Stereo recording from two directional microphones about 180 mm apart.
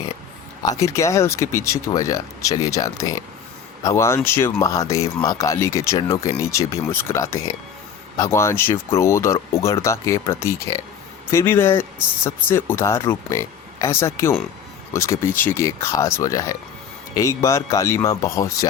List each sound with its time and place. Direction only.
0.7 s speech: 15° left (ahead or behind)